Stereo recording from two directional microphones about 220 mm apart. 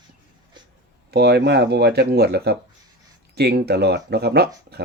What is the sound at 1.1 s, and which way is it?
Speech, 50° right (ahead or behind).